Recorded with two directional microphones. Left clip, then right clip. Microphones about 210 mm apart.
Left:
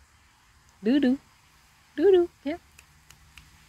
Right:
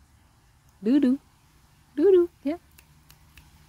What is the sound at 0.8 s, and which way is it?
Speech, 35° right (ahead or behind).